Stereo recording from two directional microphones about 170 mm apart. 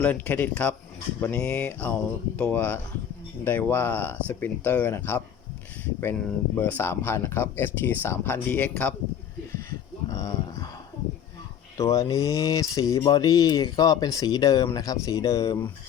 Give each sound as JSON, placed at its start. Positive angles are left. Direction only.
{"t": 0.0, "sound": "speech", "side_deg": 10}
{"t": 9.6, "sound": "a sound", "side_deg": 20}
{"t": 11.8, "sound": "speech", "side_deg": 20}